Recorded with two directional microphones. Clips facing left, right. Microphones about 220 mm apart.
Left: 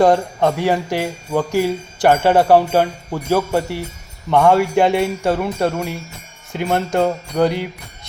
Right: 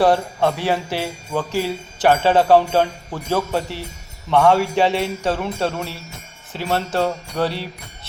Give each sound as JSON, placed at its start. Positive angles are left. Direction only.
{"t": 0.0, "sound": "jingle bell", "side_deg": 15}